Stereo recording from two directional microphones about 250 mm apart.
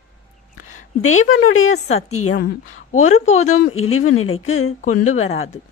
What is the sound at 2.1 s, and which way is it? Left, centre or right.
Speech, left.